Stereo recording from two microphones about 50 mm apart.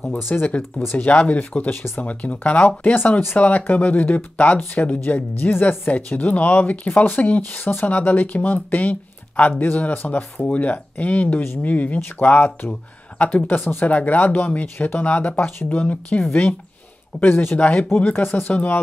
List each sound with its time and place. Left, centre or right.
0.6 s speech: left
0.9 s speech: left
3.3 s speech: left
17.3 s speech: left
17.6 s speech: left
18.2 s speech: left
18.5 s speech: left